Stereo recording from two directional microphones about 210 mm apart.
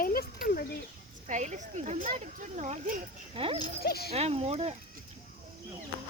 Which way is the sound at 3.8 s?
50° left (ahead or behind).